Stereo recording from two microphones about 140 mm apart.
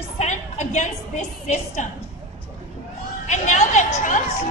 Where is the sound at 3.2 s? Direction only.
55° left (ahead or behind).